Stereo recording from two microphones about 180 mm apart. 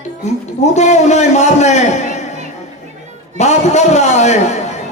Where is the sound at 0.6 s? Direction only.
40° left (ahead or behind).